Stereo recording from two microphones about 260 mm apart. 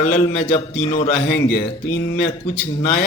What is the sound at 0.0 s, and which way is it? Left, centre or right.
A man's voice, left.